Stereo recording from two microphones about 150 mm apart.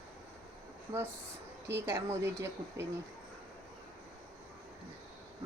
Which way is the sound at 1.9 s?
15° right (ahead or behind).